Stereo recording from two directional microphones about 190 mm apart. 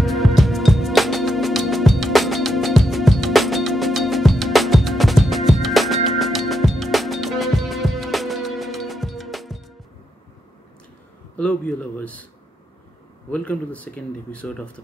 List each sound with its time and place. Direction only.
0.0 s music: centre (ahead or behind)
11.3 s a sound: 5° left (ahead or behind)
13.3 s speech: 5° left (ahead or behind)